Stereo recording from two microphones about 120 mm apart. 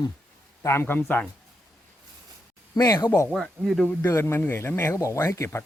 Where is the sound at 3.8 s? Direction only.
20° left (ahead or behind).